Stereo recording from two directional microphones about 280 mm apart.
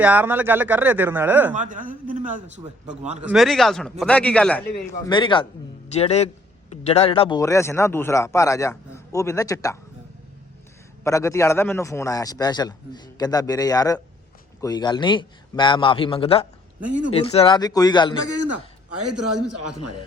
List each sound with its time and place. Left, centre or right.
0.0 s speech: centre
1.5 s a man's voice: right
3.2 s speech: centre
5.0 s a man's voice: centre
11.0 s a man's voice: centre
18.3 s a man's voice: right
18.9 s a man's voice: right